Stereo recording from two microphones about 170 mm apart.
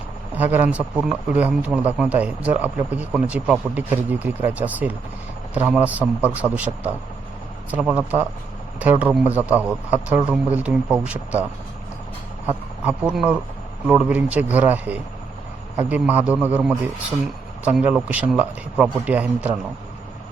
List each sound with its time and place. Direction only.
0.3 s a man's voice: 10° right (ahead or behind)
12.5 s a man's voice: 10° right (ahead or behind)